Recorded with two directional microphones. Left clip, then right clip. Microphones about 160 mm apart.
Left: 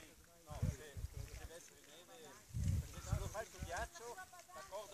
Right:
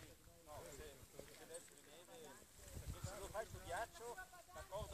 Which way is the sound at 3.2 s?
15° right (ahead or behind).